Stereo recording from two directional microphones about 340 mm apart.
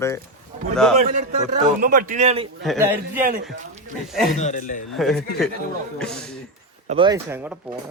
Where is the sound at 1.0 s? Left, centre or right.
Right.